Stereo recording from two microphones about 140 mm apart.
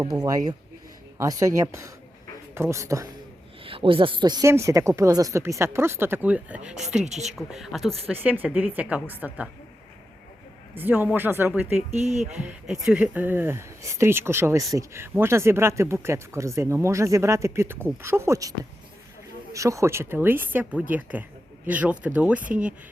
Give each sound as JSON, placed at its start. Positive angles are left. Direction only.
{"t": 0.0, "sound": "speech", "side_deg": -30}
{"t": 3.6, "sound": "speech", "side_deg": -40}
{"t": 7.0, "sound": "a woman's voice", "side_deg": -55}
{"t": 7.3, "sound": "speech", "side_deg": 0}
{"t": 8.1, "sound": "a woman's voice", "side_deg": -15}
{"t": 10.8, "sound": "a woman's voice", "side_deg": -15}
{"t": 11.9, "sound": "speech", "side_deg": -55}
{"t": 12.3, "sound": "speech", "side_deg": -10}
{"t": 19.5, "sound": "a woman's voice", "side_deg": -20}